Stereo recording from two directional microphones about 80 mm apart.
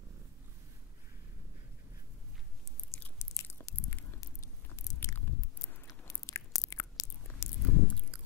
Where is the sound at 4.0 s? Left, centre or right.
Left.